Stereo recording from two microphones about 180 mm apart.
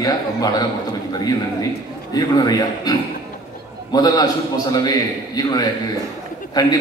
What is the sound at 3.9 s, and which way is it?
Speech, 20° left (ahead or behind).